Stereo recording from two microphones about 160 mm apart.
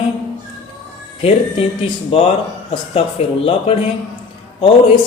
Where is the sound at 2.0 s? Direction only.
40° left (ahead or behind).